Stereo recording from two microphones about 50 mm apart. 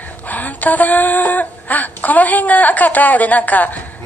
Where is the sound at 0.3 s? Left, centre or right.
Left.